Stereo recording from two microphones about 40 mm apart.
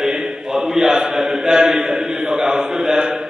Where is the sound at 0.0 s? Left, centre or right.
Centre.